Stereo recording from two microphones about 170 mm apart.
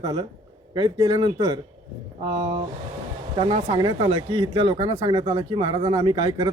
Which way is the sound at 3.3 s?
35° right (ahead or behind).